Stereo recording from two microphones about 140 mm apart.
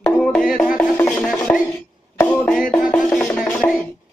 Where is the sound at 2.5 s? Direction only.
5° left (ahead or behind).